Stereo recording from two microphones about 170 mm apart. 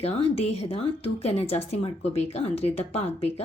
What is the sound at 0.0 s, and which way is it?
Speech, 35° left (ahead or behind).